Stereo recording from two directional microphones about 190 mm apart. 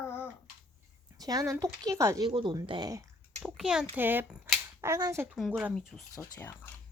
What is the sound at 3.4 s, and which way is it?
Speech, 5° right (ahead or behind).